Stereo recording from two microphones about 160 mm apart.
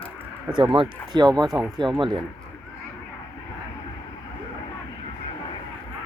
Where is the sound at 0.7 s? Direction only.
30° right (ahead or behind).